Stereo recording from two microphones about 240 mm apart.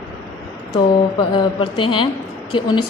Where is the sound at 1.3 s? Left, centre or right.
Centre.